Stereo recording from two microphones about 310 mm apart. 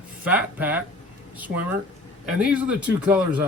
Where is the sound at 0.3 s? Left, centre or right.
Centre.